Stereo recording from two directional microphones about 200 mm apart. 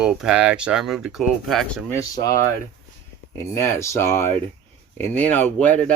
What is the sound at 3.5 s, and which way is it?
Speech, 15° left (ahead or behind).